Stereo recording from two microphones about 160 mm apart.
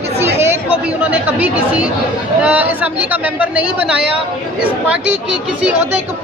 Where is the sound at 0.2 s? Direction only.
15° right (ahead or behind).